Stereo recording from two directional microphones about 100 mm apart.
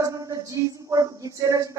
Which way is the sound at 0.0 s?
35° right (ahead or behind).